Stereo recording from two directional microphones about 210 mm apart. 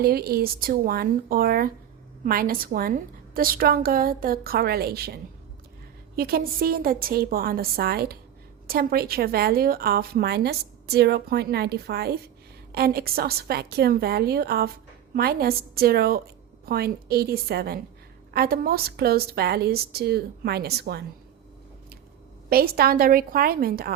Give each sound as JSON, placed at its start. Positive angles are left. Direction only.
{"t": 0.0, "sound": "a woman's voice", "side_deg": -45}
{"t": 22.4, "sound": "a woman's voice", "side_deg": -45}